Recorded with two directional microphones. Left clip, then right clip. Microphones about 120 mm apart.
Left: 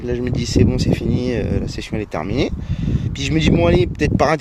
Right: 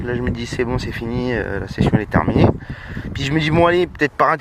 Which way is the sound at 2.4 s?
40° left (ahead or behind).